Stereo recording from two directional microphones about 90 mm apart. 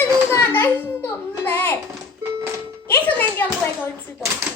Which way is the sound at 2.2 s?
35° right (ahead or behind).